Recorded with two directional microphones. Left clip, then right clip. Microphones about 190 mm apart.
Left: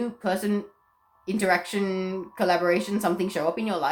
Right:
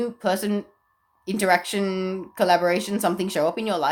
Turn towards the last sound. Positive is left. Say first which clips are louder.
# right 3 dB
turn(degrees=-45)  # may be behind; listen again after turning